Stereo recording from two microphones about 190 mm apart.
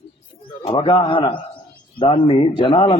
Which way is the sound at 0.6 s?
30° left (ahead or behind).